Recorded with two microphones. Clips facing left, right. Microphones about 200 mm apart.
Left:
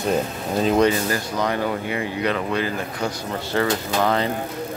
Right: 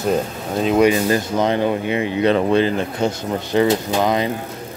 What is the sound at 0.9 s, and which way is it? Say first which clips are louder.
Speech: right 5 dB; 20° right (ahead or behind).